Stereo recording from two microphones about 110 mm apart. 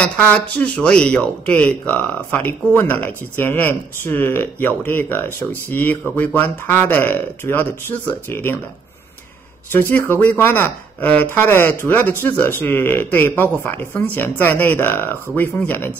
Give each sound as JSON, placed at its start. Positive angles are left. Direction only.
{"t": 0.0, "sound": "speech", "side_deg": 10}
{"t": 9.7, "sound": "speech", "side_deg": 20}